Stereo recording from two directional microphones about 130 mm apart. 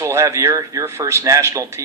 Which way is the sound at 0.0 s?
20° right (ahead or behind).